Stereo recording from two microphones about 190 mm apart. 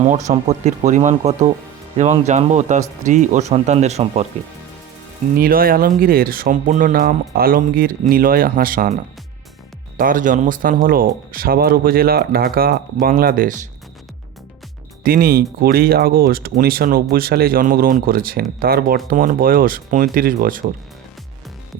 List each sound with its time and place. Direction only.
0.0 s speech: 35° right (ahead or behind)
5.4 s speech: 50° right (ahead or behind)
10.0 s speech: 45° right (ahead or behind)
15.0 s speech: 50° right (ahead or behind)